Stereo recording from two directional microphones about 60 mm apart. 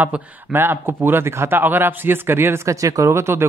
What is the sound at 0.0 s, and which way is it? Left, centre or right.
Speech, right.